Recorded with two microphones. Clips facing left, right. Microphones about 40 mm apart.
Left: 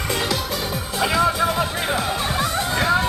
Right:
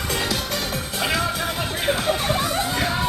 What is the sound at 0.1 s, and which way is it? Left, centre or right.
Music, centre.